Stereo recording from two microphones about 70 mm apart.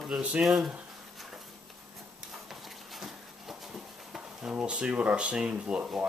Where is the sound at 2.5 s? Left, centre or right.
Centre.